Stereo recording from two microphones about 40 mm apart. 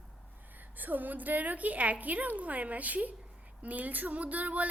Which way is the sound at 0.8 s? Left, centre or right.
Right.